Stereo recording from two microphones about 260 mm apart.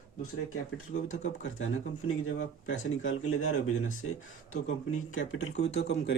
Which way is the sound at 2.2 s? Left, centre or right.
Left.